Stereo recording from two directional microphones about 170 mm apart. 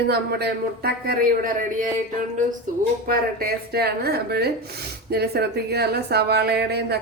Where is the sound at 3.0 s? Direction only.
60° right (ahead or behind).